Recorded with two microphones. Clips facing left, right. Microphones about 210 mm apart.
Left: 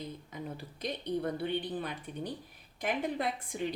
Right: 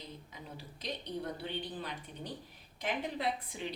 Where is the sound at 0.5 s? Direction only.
55° left (ahead or behind).